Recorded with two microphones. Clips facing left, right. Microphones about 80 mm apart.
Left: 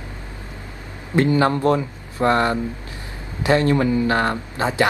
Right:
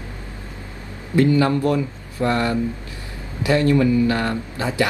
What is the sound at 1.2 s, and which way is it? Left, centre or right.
Speech, left.